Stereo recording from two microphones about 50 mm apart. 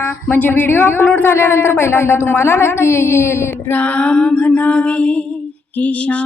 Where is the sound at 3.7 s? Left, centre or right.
Left.